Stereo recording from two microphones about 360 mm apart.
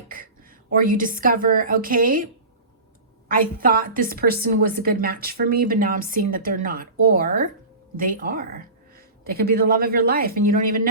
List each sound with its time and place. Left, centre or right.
0.1 s a woman's voice: right
3.2 s a woman's voice: right